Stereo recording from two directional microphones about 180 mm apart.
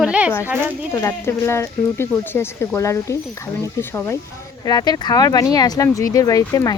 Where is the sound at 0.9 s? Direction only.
15° left (ahead or behind).